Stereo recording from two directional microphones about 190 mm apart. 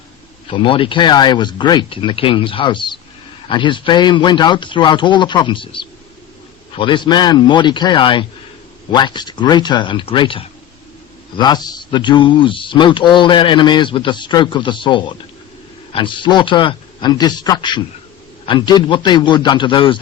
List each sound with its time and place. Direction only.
0.4 s speech: 25° left (ahead or behind)